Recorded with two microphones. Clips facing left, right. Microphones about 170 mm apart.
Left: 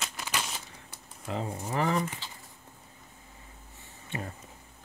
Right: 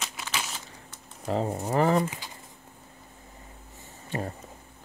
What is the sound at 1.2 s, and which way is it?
Speech, 40° right (ahead or behind).